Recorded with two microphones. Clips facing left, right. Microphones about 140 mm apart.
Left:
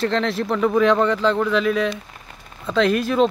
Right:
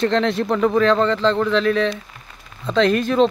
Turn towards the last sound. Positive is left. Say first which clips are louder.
# right 2 dB
turn(degrees=5)  # may be behind; listen again after turning